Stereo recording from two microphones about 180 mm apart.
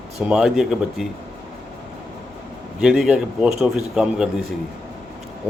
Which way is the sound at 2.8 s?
Centre (ahead or behind).